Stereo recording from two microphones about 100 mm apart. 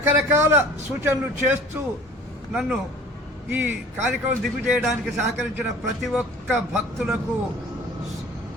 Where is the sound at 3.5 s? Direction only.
15° right (ahead or behind).